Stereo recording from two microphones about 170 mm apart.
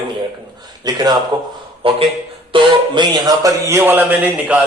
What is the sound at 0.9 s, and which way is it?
A man's voice, 25° right (ahead or behind).